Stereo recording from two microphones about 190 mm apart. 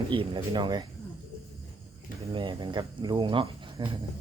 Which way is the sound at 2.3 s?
25° right (ahead or behind).